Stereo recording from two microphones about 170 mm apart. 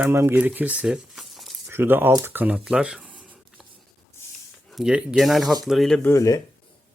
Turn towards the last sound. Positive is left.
turn(degrees=20)  # may be behind; listen again after turning